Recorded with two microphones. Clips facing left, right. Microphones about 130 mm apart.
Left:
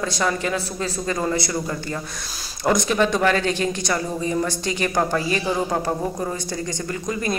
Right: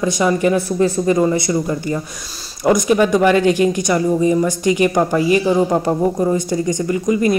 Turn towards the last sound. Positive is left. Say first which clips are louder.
# right 9 dB
turn(degrees=-15)  # may be behind; listen again after turning